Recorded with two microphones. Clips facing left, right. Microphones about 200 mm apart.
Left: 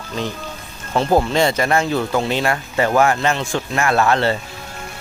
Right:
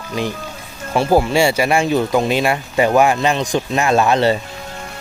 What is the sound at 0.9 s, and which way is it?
Speech, 10° right (ahead or behind).